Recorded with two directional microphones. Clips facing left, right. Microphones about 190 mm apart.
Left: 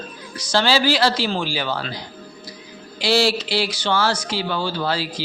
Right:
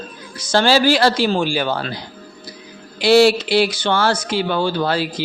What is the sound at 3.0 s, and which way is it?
Speech, 55° right (ahead or behind).